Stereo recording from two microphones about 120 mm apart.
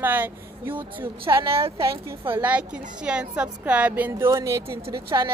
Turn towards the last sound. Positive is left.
turn(degrees=-35)  # may be behind; listen again after turning